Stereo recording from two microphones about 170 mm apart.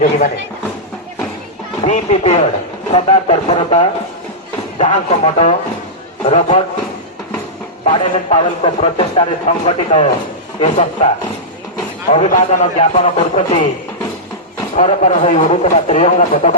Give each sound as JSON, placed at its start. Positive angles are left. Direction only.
{"t": 1.8, "sound": "speech", "side_deg": 40}
{"t": 7.9, "sound": "speech", "side_deg": 35}
{"t": 12.3, "sound": "speech", "side_deg": 35}
{"t": 14.8, "sound": "speech", "side_deg": 40}